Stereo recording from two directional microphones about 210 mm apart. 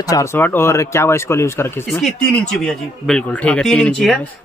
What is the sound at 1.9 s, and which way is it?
Speech, centre (ahead or behind).